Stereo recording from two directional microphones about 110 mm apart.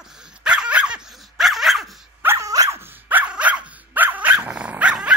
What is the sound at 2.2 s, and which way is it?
Dog, 25° right (ahead or behind).